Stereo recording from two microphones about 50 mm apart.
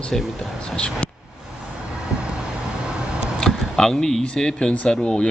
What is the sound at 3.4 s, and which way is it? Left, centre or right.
Speech, centre.